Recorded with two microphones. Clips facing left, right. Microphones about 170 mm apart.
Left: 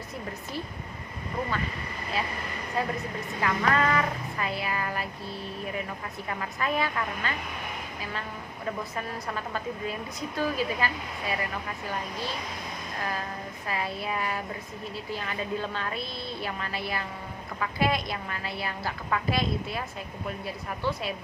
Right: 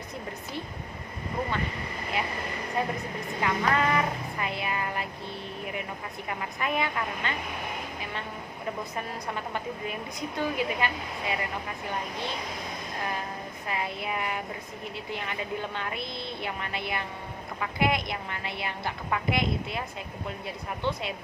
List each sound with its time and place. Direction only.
2.8 s a woman's voice: 20° right (ahead or behind)
6.2 s a woman's voice: 20° right (ahead or behind)
8.8 s a woman's voice: 20° right (ahead or behind)
13.7 s a woman's voice: 20° right (ahead or behind)